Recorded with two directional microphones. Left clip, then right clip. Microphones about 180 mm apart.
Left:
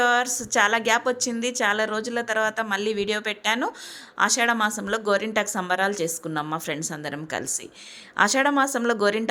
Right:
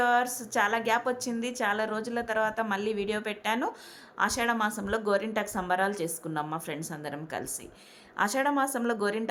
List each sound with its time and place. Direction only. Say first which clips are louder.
0.0 s a woman's voice: left 4 dB; 15° left (ahead or behind)